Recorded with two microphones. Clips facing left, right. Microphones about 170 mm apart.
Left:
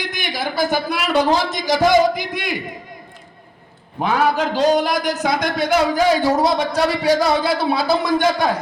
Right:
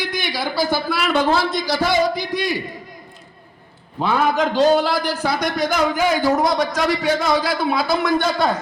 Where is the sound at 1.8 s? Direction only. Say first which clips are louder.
Left 7 dB; 50° left (ahead or behind).